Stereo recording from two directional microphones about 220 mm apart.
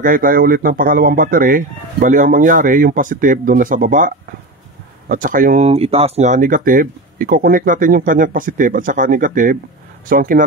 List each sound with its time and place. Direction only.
0.0 s speech: 40° right (ahead or behind)